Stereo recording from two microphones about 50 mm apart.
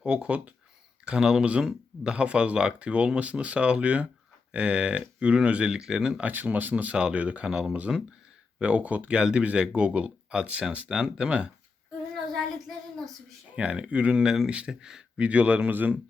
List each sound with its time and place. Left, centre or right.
0.0 s speech: right
1.0 s speech: centre
6.2 s speech: right
6.9 s speech: right
12.3 s child singing: centre
13.6 s speech: right
14.1 s speech: centre
15.2 s speech: right